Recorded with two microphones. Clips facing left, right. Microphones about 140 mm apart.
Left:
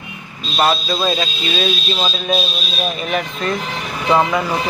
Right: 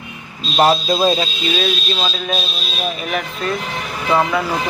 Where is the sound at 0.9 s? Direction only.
25° right (ahead or behind).